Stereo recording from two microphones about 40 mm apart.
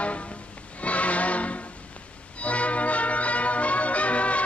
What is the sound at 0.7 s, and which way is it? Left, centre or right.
Music, left.